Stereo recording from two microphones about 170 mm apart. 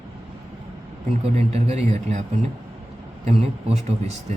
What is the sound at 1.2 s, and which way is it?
Speech, 35° right (ahead or behind).